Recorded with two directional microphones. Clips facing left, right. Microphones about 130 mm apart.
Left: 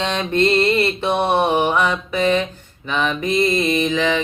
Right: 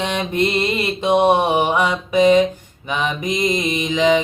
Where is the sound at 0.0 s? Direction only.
10° right (ahead or behind).